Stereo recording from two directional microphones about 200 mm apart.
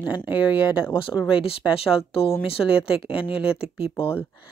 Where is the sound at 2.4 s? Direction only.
30° left (ahead or behind).